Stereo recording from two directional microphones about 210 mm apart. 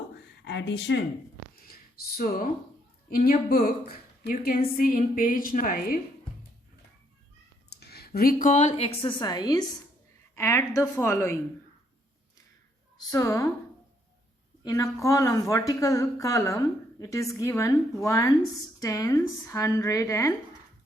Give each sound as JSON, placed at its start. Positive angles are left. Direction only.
{"t": 0.4, "sound": "speech", "side_deg": 55}
{"t": 2.1, "sound": "a woman's voice", "side_deg": 40}
{"t": 7.7, "sound": "a woman's voice", "side_deg": 50}
{"t": 13.1, "sound": "speech", "side_deg": 15}
{"t": 14.6, "sound": "speech", "side_deg": 15}